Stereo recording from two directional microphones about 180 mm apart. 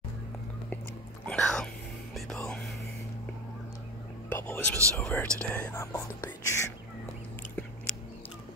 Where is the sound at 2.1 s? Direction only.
5° left (ahead or behind).